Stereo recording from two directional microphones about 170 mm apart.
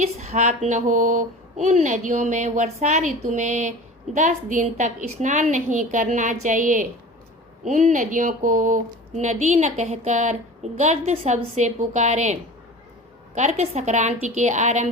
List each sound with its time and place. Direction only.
0.0 s speech: 40° right (ahead or behind)